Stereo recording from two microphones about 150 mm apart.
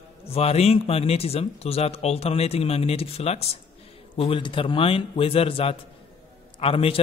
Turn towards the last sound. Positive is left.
turn(degrees=40)  # may be behind; listen again after turning